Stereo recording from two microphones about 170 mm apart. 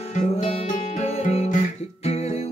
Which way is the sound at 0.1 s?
35° left (ahead or behind).